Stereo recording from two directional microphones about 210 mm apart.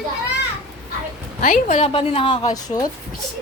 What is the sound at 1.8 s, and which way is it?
A woman's voice, 30° left (ahead or behind).